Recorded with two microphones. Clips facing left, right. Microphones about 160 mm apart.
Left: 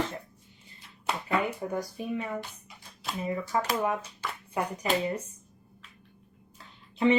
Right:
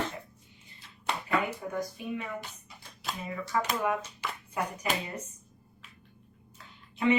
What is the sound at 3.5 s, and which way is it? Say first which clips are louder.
Speech: even; 25° left (ahead or behind).